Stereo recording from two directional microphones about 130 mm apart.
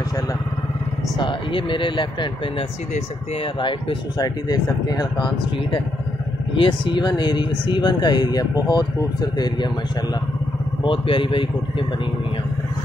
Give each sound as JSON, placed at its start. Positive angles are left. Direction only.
{"t": 1.1, "sound": "speech", "side_deg": 40}
{"t": 4.2, "sound": "speech", "side_deg": 30}
{"t": 10.8, "sound": "speech", "side_deg": 40}